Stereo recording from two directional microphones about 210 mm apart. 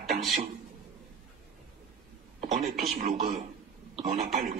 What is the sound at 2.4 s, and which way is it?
Speech, 35° right (ahead or behind).